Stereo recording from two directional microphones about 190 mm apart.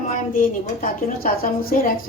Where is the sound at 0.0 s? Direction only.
45° left (ahead or behind).